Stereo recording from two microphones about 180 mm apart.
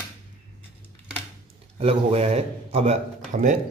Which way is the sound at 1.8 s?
35° right (ahead or behind).